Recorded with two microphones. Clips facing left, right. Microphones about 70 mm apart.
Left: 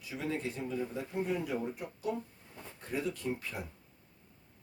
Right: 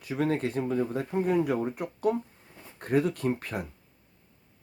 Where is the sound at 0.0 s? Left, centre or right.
Right.